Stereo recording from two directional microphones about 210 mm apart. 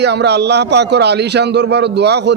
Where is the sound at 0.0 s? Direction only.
55° right (ahead or behind).